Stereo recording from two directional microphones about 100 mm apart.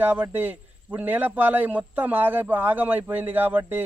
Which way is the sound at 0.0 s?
20° right (ahead or behind).